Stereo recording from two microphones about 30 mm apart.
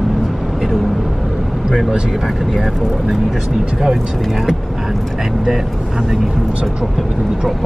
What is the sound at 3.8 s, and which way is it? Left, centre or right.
Speech, centre.